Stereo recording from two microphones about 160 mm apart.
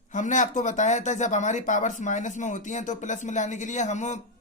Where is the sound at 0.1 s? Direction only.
50° left (ahead or behind).